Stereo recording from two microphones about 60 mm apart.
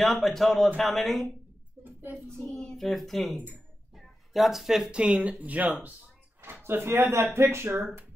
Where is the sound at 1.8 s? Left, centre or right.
Right.